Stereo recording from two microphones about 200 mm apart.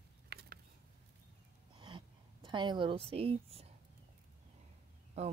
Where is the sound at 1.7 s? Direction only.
25° right (ahead or behind).